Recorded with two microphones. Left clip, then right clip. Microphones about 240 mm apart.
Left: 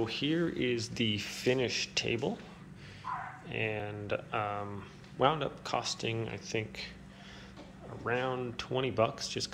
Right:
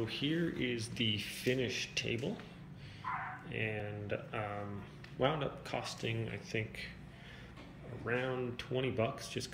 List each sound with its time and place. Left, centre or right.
0.0 s speech: centre
3.4 s speech: centre
8.0 s speech: centre